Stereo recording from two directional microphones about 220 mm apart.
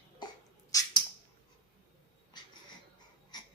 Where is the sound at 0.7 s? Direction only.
15° left (ahead or behind).